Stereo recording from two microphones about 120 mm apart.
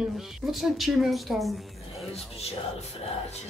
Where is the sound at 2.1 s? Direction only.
60° left (ahead or behind).